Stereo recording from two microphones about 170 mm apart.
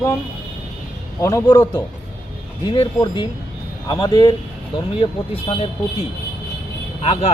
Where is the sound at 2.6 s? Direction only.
30° left (ahead or behind).